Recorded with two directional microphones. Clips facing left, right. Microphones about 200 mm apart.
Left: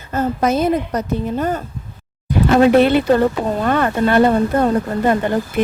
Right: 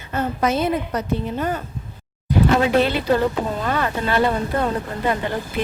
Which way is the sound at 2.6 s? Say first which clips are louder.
Left 6 dB; 55° left (ahead or behind).